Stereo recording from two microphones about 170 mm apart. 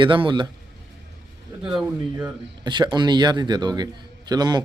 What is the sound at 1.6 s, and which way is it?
Speech, 5° right (ahead or behind).